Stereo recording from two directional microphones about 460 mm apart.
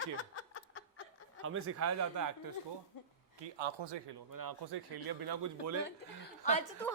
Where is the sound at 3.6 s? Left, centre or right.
Right.